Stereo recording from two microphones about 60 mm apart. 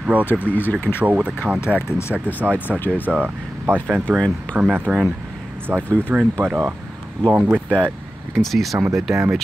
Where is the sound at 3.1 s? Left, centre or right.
Right.